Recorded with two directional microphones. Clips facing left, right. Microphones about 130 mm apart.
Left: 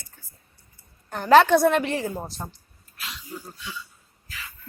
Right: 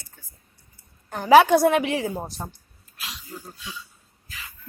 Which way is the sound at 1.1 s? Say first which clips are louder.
Right 1 dB; 10° right (ahead or behind).